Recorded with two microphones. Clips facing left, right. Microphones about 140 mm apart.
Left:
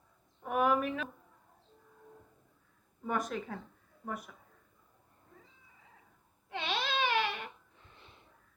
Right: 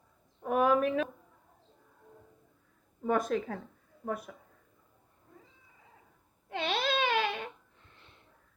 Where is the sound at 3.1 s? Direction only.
50° right (ahead or behind).